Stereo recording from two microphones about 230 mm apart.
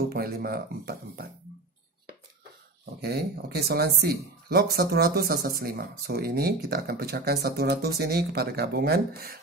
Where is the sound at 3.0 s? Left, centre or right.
Right.